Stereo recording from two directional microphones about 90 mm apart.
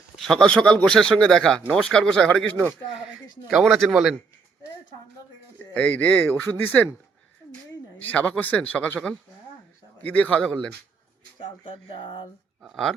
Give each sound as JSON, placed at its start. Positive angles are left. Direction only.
{"t": 0.2, "sound": "speech", "side_deg": 5}
{"t": 3.6, "sound": "speech", "side_deg": 5}
{"t": 5.7, "sound": "speech", "side_deg": 15}
{"t": 7.9, "sound": "speech", "side_deg": 15}
{"t": 11.3, "sound": "speech", "side_deg": 70}
{"t": 12.6, "sound": "speech", "side_deg": 5}